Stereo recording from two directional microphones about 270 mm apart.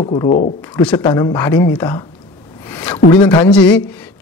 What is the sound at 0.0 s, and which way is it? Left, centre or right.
A woman's voice, left.